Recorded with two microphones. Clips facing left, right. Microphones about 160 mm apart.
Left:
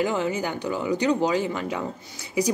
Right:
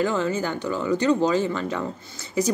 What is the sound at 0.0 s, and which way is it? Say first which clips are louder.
Speech: right 1 dB; 15° left (ahead or behind).